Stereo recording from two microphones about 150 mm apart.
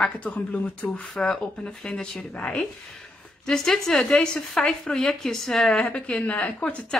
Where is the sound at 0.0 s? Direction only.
5° left (ahead or behind).